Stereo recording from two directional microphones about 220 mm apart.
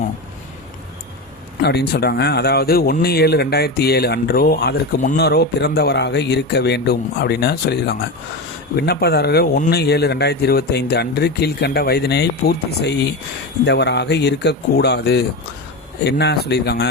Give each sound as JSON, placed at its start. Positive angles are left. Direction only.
{"t": 1.6, "sound": "speech", "side_deg": 45}